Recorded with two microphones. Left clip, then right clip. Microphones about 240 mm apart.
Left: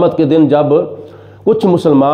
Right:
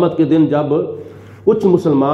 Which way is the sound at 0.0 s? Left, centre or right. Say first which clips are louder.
Left 3 dB; left.